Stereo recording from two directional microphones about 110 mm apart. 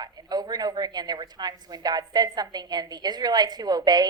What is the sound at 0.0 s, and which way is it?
A woman's voice, 35° right (ahead or behind).